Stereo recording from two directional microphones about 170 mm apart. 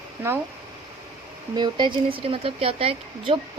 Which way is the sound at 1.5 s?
25° right (ahead or behind).